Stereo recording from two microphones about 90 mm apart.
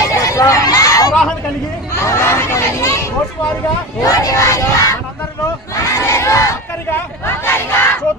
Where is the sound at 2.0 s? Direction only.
30° left (ahead or behind).